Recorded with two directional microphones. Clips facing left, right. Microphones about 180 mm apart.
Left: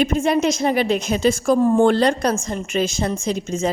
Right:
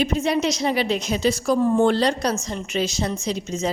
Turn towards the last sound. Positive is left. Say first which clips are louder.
# left 3 dB
turn(degrees=50)  # may be behind; listen again after turning